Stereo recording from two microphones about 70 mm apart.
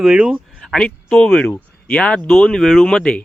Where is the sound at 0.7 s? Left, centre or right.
Centre.